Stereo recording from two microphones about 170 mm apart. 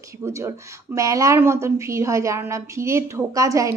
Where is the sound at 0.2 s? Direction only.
15° right (ahead or behind).